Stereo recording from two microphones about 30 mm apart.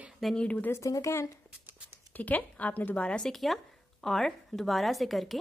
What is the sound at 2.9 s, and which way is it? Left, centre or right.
Speech, left.